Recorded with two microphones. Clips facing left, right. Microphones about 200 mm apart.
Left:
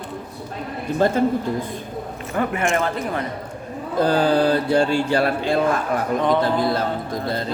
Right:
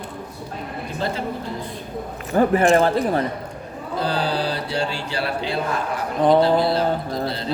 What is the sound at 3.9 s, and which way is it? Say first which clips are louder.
Speech: left 6 dB; 50° left (ahead or behind).